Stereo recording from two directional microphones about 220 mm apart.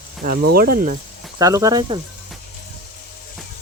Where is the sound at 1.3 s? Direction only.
15° right (ahead or behind).